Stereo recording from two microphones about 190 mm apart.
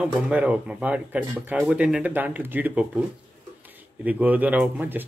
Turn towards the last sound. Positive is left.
turn(degrees=-10)  # may be behind; listen again after turning